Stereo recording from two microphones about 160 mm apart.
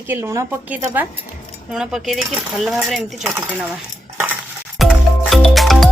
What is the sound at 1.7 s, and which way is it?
Speech, centre (ahead or behind).